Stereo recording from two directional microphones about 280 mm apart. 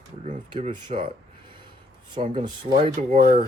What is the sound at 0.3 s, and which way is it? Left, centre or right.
Speech, right.